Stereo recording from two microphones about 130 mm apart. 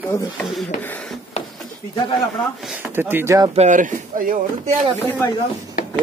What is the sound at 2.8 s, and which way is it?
Speech, 15° right (ahead or behind).